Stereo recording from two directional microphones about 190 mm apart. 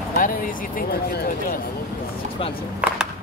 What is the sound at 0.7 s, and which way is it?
Speech, 50° left (ahead or behind).